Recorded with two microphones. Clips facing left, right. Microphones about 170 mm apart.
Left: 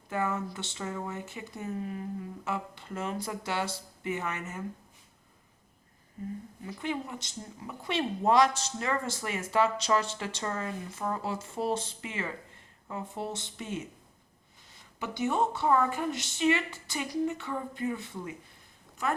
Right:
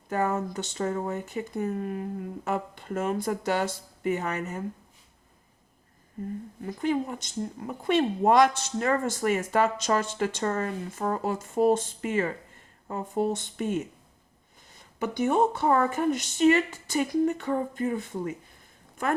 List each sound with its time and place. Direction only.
0.1 s speech: 40° right (ahead or behind)
6.7 s speech: 45° right (ahead or behind)
15.0 s speech: 50° right (ahead or behind)